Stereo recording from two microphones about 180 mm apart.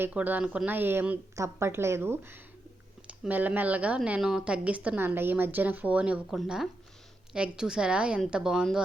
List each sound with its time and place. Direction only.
0.0 s a woman's voice: 10° right (ahead or behind)